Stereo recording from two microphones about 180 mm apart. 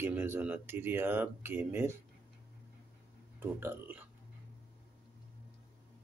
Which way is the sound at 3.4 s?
10° right (ahead or behind).